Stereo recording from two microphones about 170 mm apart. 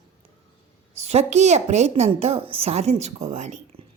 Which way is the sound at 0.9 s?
40° right (ahead or behind).